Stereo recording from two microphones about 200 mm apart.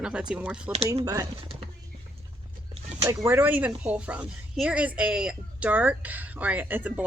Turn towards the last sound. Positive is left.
turn(degrees=-10)  # may be behind; listen again after turning